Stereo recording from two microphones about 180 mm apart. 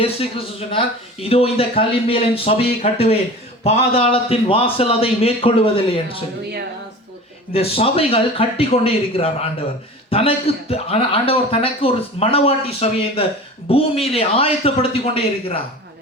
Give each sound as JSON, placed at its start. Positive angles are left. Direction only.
{"t": 0.0, "sound": "a man's voice", "side_deg": 30}
{"t": 7.5, "sound": "a man's voice", "side_deg": 35}